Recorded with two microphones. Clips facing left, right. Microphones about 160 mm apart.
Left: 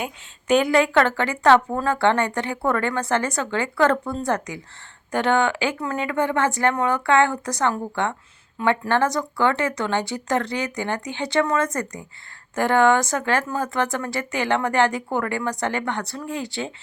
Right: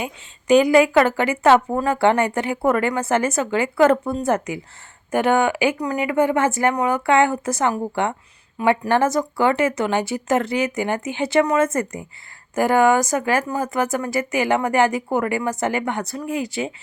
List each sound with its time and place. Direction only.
0.0 s a woman's voice: centre (ahead or behind); by 11.9 s 25° right (ahead or behind)
12.5 s a woman's voice: 5° right (ahead or behind)